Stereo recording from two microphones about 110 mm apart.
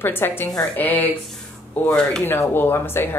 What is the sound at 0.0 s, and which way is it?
A woman's voice, 20° left (ahead or behind).